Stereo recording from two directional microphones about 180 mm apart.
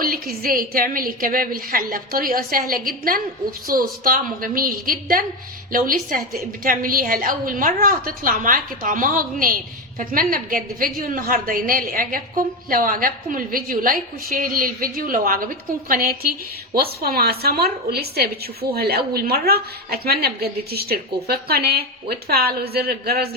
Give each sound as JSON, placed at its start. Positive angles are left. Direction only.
{"t": 0.0, "sound": "a woman's voice", "side_deg": -55}